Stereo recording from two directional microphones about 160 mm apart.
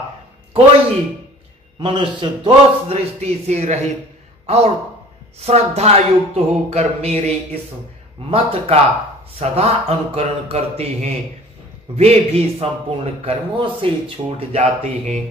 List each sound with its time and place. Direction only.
1.8 s a man's voice: 30° right (ahead or behind)